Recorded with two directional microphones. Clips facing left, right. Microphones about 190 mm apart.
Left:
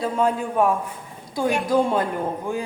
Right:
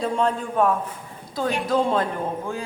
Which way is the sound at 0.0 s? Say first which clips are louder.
Left 1 dB; 5° left (ahead or behind).